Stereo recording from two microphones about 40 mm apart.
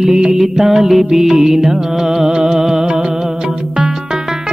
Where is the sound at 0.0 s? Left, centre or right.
Centre.